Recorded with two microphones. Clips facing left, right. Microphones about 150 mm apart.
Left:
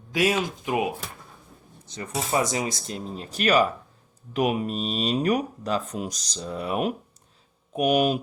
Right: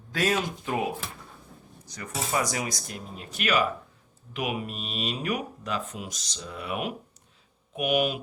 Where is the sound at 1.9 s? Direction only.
25° left (ahead or behind).